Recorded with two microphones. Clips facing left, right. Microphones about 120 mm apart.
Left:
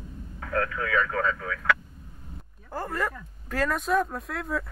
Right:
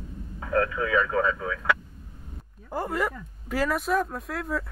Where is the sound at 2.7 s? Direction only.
15° right (ahead or behind).